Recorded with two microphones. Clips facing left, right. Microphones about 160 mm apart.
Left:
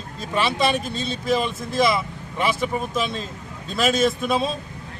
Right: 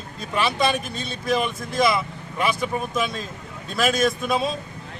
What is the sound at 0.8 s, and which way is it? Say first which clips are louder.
Speech: left 2 dB; 25° left (ahead or behind).